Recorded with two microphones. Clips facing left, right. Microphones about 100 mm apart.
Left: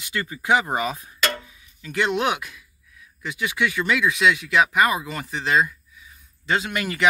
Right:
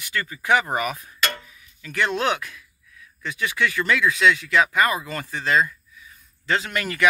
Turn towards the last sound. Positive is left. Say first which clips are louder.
# even
turn(degrees=20)  # may be behind; listen again after turning